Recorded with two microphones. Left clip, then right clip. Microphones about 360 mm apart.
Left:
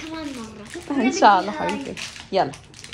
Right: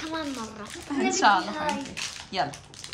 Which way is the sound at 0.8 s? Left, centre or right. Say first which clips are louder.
Left 6 dB; centre.